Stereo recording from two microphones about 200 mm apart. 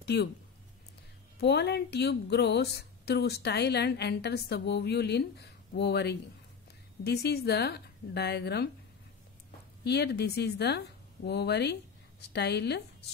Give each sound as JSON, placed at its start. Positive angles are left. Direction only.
{"t": 0.0, "sound": "speech", "side_deg": 55}
{"t": 1.4, "sound": "a woman's voice", "side_deg": 55}
{"t": 9.8, "sound": "a woman's voice", "side_deg": 55}